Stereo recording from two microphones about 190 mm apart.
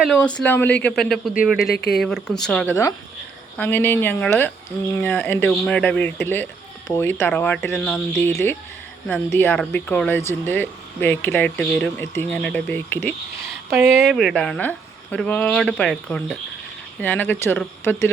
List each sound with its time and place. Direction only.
0.0 s speech: 5° left (ahead or behind)
1.6 s speech: 55° left (ahead or behind)
2.0 s speech: 5° left (ahead or behind)
13.7 s speech: 5° right (ahead or behind); by 18.0 s 10° left (ahead or behind)